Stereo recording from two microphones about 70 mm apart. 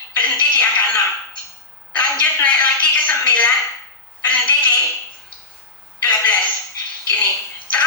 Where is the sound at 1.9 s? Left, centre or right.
Left.